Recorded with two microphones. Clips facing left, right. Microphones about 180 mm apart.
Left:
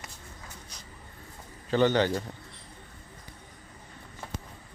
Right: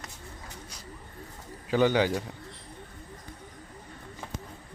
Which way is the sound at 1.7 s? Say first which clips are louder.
Even; 10° right (ahead or behind).